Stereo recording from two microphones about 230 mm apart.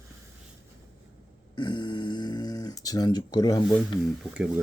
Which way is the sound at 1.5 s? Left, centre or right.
Centre.